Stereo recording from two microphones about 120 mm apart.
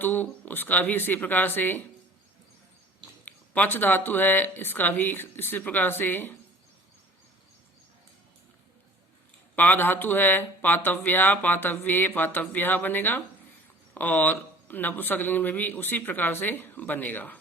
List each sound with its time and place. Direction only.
0.0 s speech: 15° left (ahead or behind)
3.2 s speech: 15° left (ahead or behind)
9.6 s speech: 15° left (ahead or behind)